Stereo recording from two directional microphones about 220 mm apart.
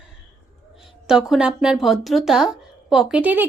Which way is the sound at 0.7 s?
Centre (ahead or behind).